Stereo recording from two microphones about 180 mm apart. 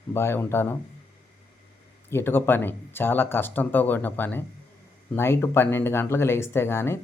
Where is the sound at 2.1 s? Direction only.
10° left (ahead or behind).